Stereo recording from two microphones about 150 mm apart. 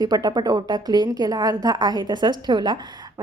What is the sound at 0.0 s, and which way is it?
A woman's voice, 25° right (ahead or behind).